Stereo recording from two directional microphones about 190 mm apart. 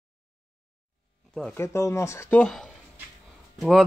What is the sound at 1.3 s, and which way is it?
Speech, 5° left (ahead or behind).